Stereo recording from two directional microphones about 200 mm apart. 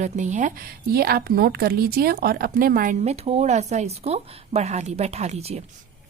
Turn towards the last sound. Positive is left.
turn(degrees=-30)  # may be behind; listen again after turning